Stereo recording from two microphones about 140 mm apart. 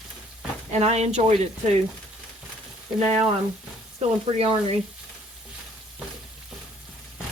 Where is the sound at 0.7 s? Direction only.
50° right (ahead or behind).